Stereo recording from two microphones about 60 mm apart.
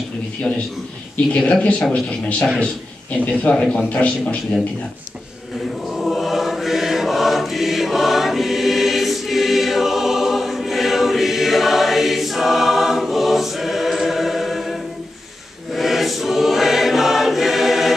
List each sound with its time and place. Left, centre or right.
1.1 s speech: left
3.3 s speech: centre
5.9 s choir: centre